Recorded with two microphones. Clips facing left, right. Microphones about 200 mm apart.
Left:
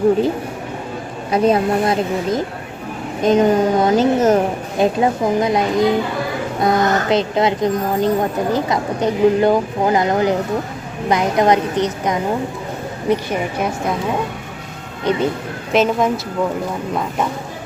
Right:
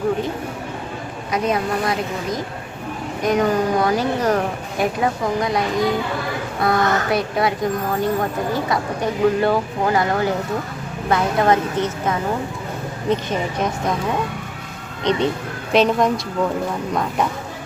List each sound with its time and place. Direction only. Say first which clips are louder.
1.3 s a woman's voice: left 6 dB; 30° left (ahead or behind); by 13.9 s 10° left (ahead or behind)
15.1 s a woman's voice: left 1 dB; 5° left (ahead or behind)